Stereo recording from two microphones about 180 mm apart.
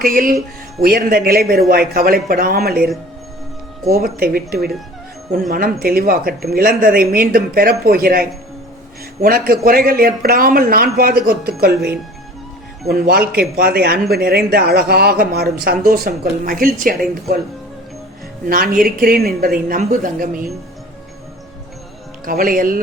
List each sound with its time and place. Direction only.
0.0 s a woman's voice: 50° right (ahead or behind)
18.4 s a woman's voice: 50° right (ahead or behind)
22.3 s a woman's voice: 50° right (ahead or behind)